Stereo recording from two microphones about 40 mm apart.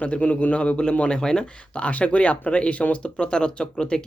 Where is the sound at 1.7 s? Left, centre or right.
Left.